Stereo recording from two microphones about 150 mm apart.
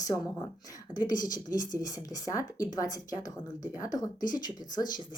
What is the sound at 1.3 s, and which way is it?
Speech, 25° left (ahead or behind).